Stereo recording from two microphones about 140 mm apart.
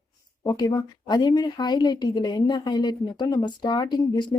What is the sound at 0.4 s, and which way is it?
A woman's voice, 30° left (ahead or behind).